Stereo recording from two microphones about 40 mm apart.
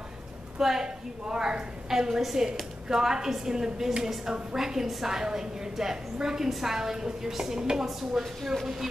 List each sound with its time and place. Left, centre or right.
0.6 s a woman's voice: centre
0.8 s a woman's voice: centre